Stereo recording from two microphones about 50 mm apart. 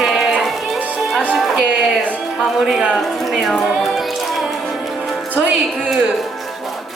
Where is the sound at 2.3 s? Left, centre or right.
Centre.